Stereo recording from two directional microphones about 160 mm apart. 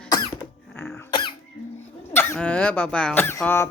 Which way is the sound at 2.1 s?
10° left (ahead or behind).